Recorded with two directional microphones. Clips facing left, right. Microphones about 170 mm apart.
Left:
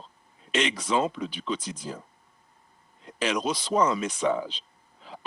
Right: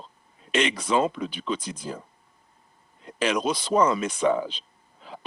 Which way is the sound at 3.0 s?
55° right (ahead or behind).